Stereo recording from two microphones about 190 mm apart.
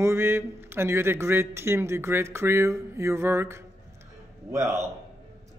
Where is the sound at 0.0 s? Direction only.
15° right (ahead or behind).